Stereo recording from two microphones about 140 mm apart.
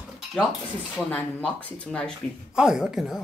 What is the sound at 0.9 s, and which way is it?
Speech, 10° left (ahead or behind).